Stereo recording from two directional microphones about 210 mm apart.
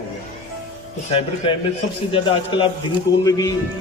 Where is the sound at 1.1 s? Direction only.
25° left (ahead or behind).